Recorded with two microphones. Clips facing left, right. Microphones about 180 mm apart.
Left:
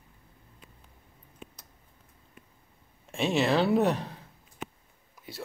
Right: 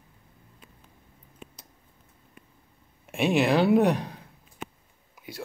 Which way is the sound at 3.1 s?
15° right (ahead or behind).